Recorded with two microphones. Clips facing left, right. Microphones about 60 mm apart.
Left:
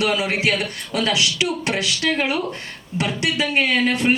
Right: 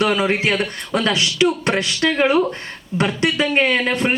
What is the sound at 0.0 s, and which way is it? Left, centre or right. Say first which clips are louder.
Speech: right 3 dB; right.